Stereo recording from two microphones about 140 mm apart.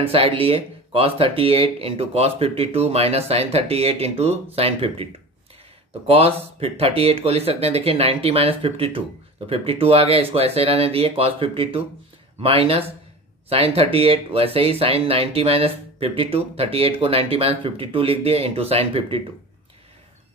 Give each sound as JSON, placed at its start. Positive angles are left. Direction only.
{"t": 0.0, "sound": "speech", "side_deg": -45}
{"t": 6.0, "sound": "speech", "side_deg": -45}